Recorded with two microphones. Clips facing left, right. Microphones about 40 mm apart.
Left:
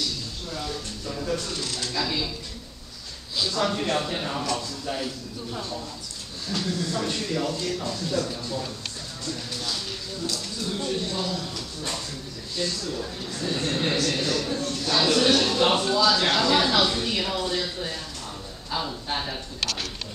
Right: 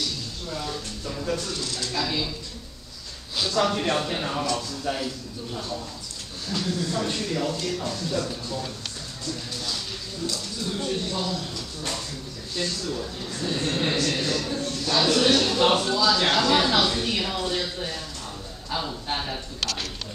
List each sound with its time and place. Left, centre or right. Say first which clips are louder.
0.5 s a sound: right 1 dB; centre
1.3 s a man's voice: even; centre
2.0 s a man's voice: right 1 dB; centre
3.3 s a man's voice: right 2 dB; right
3.6 s speech: right 1 dB; centre
6.5 s a man's voice: right 1 dB; centre
10.2 s a man's voice: right 1 dB; centre
13.2 s a man's voice: even; centre
19.0 s a man's voice: even; centre